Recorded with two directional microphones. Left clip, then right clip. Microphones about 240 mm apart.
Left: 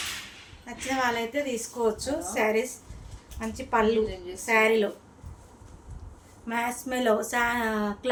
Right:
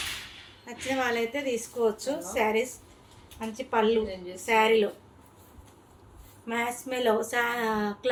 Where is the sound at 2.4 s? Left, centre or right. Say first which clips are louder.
Left 1 dB; centre.